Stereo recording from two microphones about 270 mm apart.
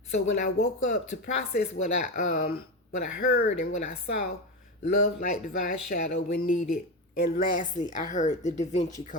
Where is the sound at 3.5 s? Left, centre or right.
Left.